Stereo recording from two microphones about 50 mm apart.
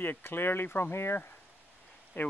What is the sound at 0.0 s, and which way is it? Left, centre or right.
Speech, left.